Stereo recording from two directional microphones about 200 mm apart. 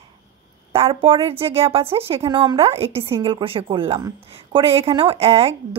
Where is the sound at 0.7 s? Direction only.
25° right (ahead or behind).